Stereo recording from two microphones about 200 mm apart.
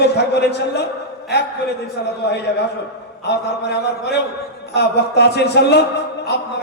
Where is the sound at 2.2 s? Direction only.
55° left (ahead or behind).